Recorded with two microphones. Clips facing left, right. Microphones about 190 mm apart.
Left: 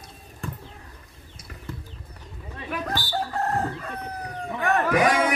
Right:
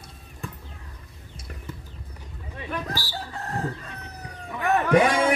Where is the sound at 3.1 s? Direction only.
55° left (ahead or behind).